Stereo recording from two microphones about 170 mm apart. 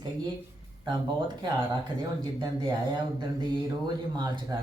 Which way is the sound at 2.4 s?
30° right (ahead or behind).